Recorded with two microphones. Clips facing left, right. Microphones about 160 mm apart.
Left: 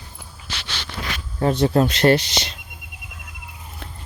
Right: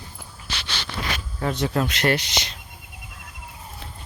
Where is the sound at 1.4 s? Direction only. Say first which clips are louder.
Left 7 dB; 30° left (ahead or behind).